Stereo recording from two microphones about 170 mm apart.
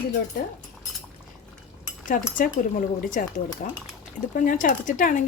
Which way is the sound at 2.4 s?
55° left (ahead or behind).